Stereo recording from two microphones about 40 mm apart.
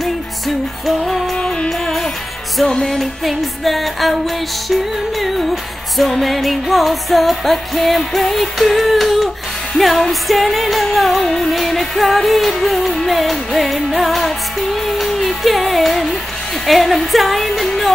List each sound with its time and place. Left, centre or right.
0.8 s music: centre
1.3 s music: left
1.7 s music: centre
2.7 s music: centre
3.0 s music: centre
5.2 s music: centre